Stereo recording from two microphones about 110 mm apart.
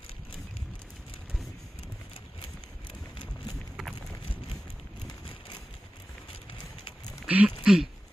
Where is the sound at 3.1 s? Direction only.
40° left (ahead or behind).